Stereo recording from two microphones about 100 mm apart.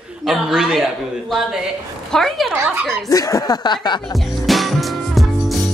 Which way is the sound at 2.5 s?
25° right (ahead or behind).